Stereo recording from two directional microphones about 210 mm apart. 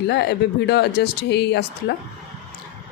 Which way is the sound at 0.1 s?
55° left (ahead or behind).